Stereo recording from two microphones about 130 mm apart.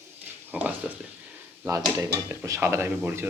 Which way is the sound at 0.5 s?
10° right (ahead or behind).